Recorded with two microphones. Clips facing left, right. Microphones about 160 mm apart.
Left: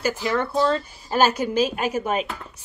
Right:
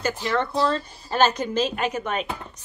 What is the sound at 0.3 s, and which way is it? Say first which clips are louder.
Speech: left 1 dB; 10° left (ahead or behind).